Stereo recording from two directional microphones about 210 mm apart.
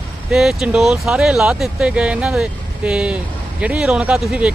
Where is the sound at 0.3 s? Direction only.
Centre (ahead or behind).